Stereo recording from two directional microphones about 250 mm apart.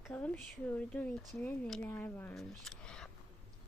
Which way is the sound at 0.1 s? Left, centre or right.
Centre.